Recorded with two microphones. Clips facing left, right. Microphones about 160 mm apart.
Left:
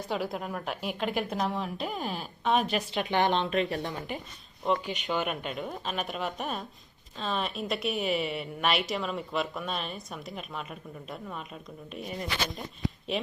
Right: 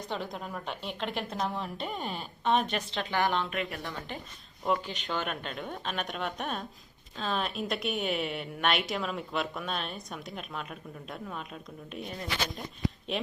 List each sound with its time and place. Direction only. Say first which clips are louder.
0.1 s a woman's voice: left 5 dB; 5° left (ahead or behind)
2.9 s speech: left 3 dB; 20° left (ahead or behind)
4.9 s a woman's voice: left 3 dB; 10° left (ahead or behind)